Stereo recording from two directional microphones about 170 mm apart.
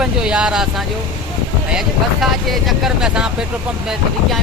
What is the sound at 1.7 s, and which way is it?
Speech, centre (ahead or behind).